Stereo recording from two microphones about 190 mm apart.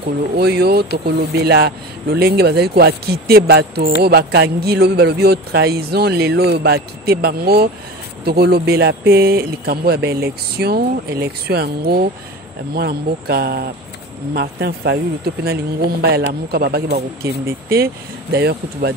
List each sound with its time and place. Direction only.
0.4 s speech: 60° right (ahead or behind)
18.3 s speech: 55° right (ahead or behind)